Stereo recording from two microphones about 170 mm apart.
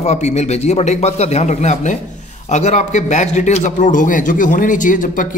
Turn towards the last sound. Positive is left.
turn(degrees=50)  # may be behind; listen again after turning